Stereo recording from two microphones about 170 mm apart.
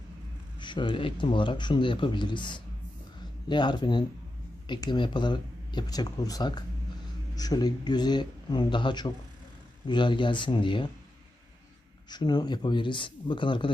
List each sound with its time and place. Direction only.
0.6 s speech: 30° left (ahead or behind)
12.0 s speech: 25° left (ahead or behind)